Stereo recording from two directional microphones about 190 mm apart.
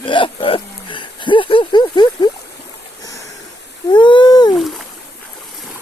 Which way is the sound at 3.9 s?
25° left (ahead or behind).